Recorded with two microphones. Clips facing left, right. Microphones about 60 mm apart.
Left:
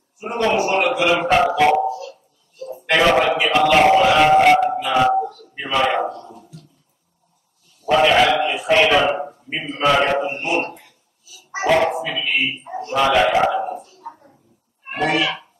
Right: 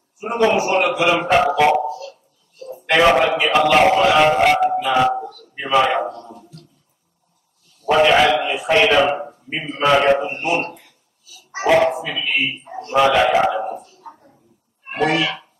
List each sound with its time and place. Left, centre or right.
0.2 s a man's voice: centre
1.7 s speech: left
2.9 s a man's voice: centre
5.2 s a man's voice: left
5.9 s a man's voice: centre
7.9 s a man's voice: centre
9.1 s a sound: centre
9.6 s a man's voice: centre
10.1 s a man's voice: centre
11.6 s a man's voice: centre
12.6 s a man's voice: centre
13.0 s a man's voice: centre
14.0 s a sound: centre
14.9 s a child's voice: centre